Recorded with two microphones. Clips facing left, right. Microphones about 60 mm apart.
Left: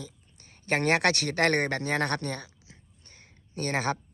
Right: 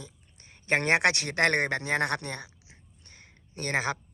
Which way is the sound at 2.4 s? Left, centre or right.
Right.